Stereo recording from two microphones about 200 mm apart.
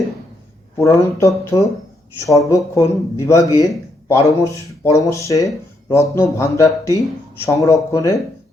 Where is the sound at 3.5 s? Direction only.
15° left (ahead or behind).